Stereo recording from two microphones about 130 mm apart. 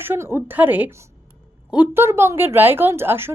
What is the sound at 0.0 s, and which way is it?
A woman's voice, 15° right (ahead or behind).